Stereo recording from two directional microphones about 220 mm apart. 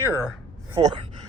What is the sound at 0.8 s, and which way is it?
Speech, 20° right (ahead or behind).